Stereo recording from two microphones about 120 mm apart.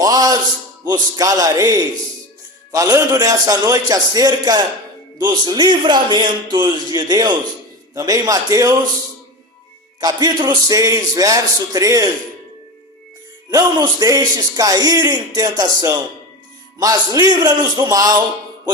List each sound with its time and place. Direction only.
0.0 s a sound: 30° right (ahead or behind)
0.9 s speech: 35° right (ahead or behind)
10.0 s a man's voice: 35° right (ahead or behind)
13.5 s speech: 30° right (ahead or behind)